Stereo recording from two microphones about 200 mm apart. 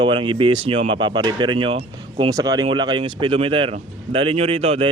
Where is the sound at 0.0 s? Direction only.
25° right (ahead or behind).